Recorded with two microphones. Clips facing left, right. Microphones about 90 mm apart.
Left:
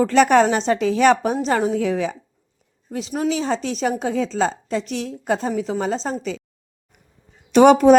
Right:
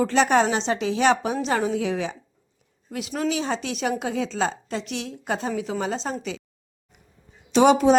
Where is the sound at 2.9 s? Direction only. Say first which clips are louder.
Left 3 dB; 30° left (ahead or behind).